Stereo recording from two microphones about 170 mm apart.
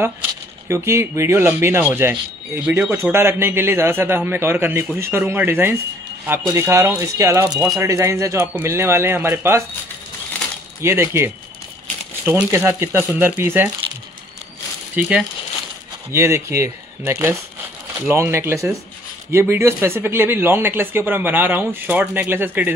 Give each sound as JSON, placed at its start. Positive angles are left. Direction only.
{"t": 0.7, "sound": "speech", "side_deg": -15}
{"t": 10.8, "sound": "speech", "side_deg": -15}
{"t": 12.4, "sound": "speech", "side_deg": -15}
{"t": 15.0, "sound": "speech", "side_deg": -10}